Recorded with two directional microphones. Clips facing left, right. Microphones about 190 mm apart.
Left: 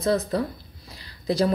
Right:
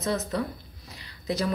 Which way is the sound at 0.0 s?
35° left (ahead or behind).